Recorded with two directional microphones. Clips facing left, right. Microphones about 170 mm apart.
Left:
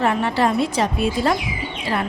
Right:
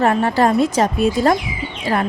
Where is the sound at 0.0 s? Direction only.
45° right (ahead or behind).